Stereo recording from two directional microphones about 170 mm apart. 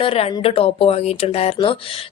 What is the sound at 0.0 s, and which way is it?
A woman's voice, 35° left (ahead or behind).